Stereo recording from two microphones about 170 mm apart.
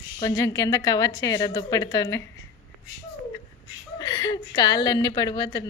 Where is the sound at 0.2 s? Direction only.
20° left (ahead or behind).